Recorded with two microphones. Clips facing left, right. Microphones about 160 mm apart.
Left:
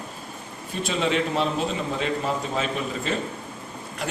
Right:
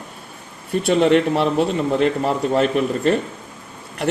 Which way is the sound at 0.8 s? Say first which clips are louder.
Right 9 dB; 60° right (ahead or behind).